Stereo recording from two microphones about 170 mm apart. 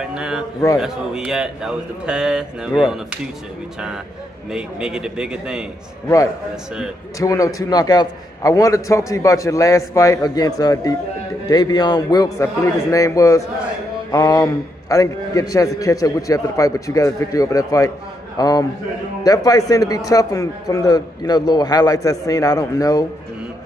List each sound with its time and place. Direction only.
0.1 s a sound: 5° right (ahead or behind)
0.7 s a man's voice: 5° right (ahead or behind)
4.5 s a man's voice: 5° right (ahead or behind)
7.2 s a man's voice: 20° left (ahead or behind)